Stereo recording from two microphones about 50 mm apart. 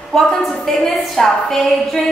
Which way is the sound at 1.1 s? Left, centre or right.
Centre.